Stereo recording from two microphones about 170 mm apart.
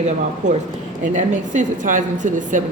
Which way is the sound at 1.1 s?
45° right (ahead or behind).